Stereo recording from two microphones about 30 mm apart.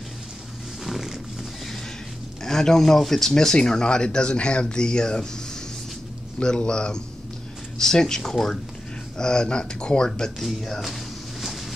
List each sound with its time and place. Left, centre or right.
0.8 s roaring cats: centre
2.4 s speech: centre
6.4 s speech: left
7.8 s speech: centre
10.4 s speech: centre